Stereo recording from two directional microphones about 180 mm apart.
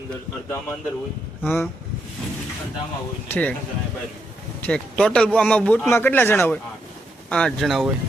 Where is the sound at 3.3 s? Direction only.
10° left (ahead or behind).